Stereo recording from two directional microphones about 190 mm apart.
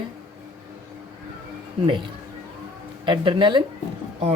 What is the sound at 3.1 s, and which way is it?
Speech, 25° right (ahead or behind).